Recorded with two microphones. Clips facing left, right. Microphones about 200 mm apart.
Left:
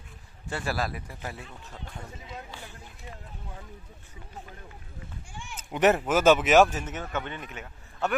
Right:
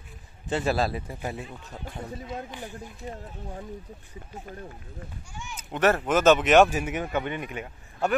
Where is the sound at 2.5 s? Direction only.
15° right (ahead or behind).